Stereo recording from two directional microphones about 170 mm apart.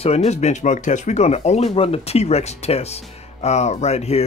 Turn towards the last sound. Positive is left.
turn(degrees=40)  # may be behind; listen again after turning